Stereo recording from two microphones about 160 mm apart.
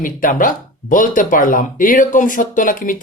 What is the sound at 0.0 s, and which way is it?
Speech, 60° left (ahead or behind).